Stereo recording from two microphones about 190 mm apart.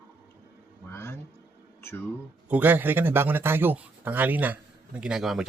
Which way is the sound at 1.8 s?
15° left (ahead or behind).